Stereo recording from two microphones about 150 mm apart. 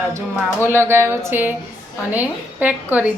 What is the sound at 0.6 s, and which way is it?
Speech, 15° right (ahead or behind).